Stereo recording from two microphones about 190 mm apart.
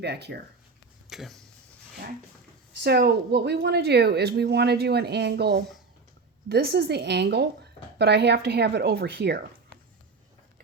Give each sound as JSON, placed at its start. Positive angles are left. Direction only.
{"t": 0.0, "sound": "a woman's voice", "side_deg": -60}
{"t": 1.1, "sound": "speech", "side_deg": 0}
{"t": 2.8, "sound": "a woman's voice", "side_deg": -55}